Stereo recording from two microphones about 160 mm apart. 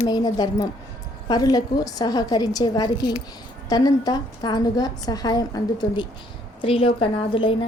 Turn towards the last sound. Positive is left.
turn(degrees=35)  # may be behind; listen again after turning